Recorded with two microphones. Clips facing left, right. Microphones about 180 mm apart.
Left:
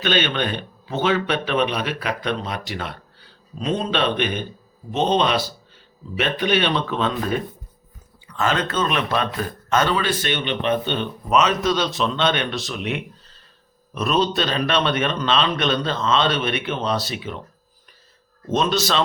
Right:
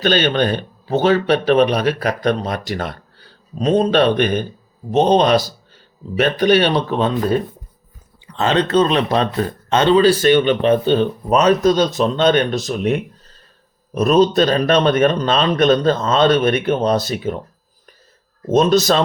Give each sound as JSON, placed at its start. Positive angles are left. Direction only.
{"t": 0.0, "sound": "a man's voice", "side_deg": -40}
{"t": 18.4, "sound": "a man's voice", "side_deg": -40}